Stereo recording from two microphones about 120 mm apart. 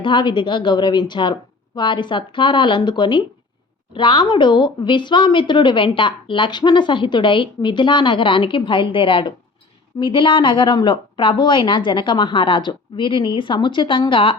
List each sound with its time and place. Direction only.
0.0 s a woman's voice: 40° left (ahead or behind)